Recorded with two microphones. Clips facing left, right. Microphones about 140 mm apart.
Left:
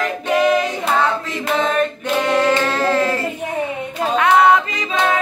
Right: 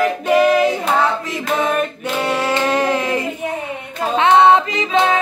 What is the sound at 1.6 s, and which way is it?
Singing, 10° right (ahead or behind).